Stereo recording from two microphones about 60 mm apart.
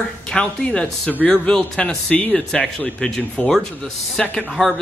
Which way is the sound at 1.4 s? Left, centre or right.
Centre.